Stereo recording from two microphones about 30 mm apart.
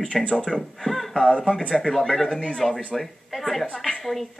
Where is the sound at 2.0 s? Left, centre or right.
Centre.